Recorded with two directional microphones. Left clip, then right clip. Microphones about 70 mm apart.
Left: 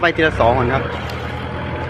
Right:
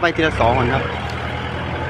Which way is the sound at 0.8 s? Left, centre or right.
Right.